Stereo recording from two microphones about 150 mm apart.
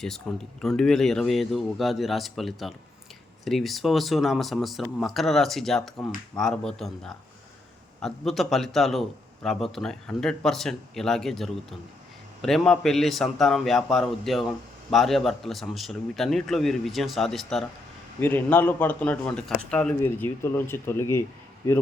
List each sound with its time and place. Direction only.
0.3 s a man's voice: centre (ahead or behind)
18.2 s a man's voice: 15° left (ahead or behind)